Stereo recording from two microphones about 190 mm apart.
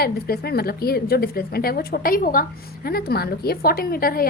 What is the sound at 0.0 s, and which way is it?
A woman's voice, 55° left (ahead or behind).